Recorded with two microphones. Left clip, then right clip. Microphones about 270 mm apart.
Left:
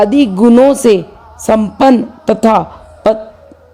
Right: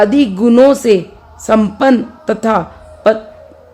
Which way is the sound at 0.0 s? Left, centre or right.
Left.